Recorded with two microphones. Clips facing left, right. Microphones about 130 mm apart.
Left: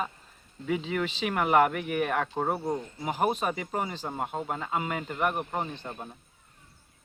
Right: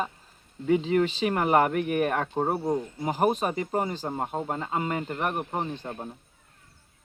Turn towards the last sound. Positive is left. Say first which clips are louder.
# right 3 dB
turn(degrees=-35)  # may be behind; listen again after turning